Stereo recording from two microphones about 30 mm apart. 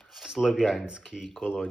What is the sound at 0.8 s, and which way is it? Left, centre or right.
Speech, right.